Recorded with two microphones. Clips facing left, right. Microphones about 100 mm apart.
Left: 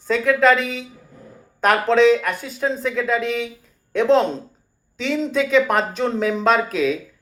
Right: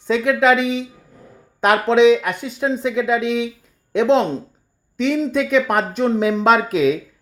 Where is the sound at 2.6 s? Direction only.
15° right (ahead or behind).